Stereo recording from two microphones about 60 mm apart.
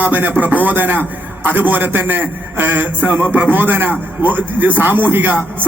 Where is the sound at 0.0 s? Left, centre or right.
Right.